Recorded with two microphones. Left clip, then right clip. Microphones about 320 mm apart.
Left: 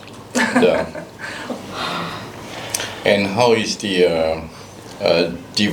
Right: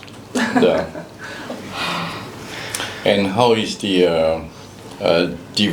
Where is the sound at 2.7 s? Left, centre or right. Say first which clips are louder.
Left 1 dB; left.